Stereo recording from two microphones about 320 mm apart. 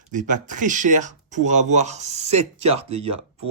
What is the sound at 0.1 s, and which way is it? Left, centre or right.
Speech, right.